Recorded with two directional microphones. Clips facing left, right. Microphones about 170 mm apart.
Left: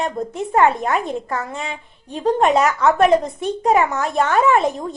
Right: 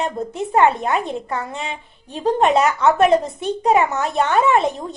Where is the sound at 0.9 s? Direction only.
Centre (ahead or behind).